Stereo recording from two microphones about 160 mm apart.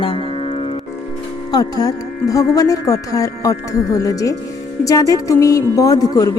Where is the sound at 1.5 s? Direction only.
25° left (ahead or behind).